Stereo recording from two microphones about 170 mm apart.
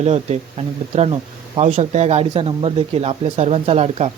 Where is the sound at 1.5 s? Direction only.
40° right (ahead or behind).